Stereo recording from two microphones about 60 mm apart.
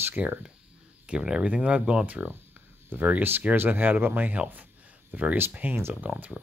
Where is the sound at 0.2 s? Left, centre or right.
Centre.